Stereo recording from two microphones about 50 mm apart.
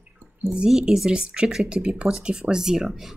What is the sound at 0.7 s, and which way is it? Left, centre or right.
Speech, centre.